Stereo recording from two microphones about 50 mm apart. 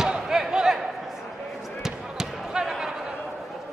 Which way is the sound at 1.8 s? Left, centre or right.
Centre.